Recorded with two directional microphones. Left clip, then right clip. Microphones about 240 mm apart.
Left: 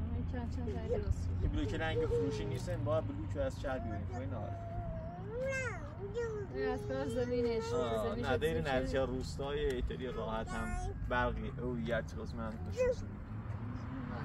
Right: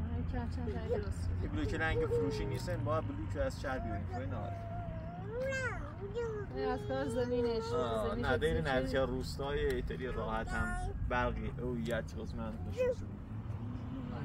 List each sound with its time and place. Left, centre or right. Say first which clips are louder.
0.4 s speech: right 1 dB; centre
1.5 s speech: right 2 dB; centre
5.4 s speech: right 1 dB; centre
7.7 s speech: even; centre